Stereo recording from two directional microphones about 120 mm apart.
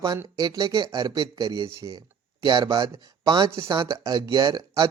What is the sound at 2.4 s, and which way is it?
Speech, 40° right (ahead or behind).